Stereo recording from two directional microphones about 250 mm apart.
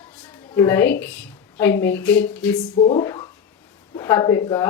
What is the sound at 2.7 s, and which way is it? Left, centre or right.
Speech, left.